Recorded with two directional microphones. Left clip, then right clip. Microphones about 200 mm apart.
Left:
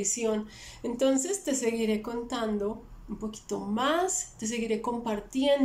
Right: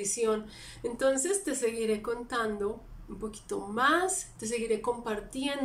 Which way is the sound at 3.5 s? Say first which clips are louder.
Right 1 dB; 10° left (ahead or behind).